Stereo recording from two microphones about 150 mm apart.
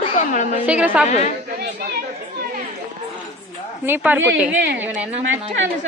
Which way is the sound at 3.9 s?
10° right (ahead or behind).